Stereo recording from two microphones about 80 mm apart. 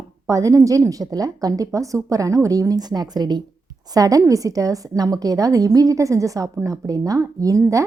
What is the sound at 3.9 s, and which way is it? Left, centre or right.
A woman's voice, right.